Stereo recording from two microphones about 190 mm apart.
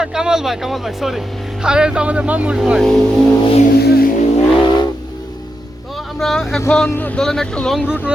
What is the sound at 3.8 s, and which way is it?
Vehicle, 55° left (ahead or behind).